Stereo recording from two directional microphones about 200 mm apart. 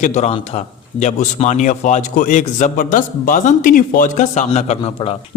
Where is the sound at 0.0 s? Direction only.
35° left (ahead or behind).